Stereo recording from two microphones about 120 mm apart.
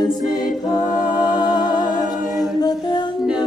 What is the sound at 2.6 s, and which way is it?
Humming, 35° left (ahead or behind).